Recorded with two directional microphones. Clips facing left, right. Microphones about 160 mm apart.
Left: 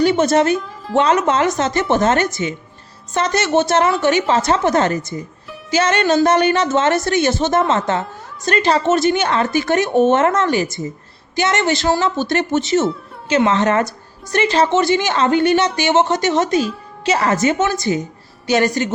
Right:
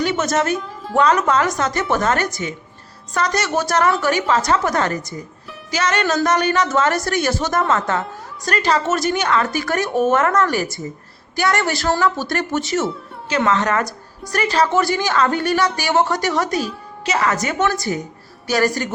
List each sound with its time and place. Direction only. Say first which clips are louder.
0.0 s a woman's voice: left 5 dB; 30° left (ahead or behind)